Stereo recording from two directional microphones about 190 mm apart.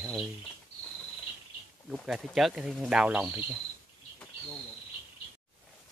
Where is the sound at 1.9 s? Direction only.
Centre (ahead or behind).